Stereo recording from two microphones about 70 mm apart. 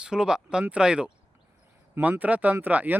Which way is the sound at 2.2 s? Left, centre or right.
Right.